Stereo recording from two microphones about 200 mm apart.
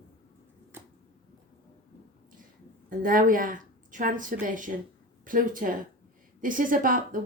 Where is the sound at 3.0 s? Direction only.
45° right (ahead or behind).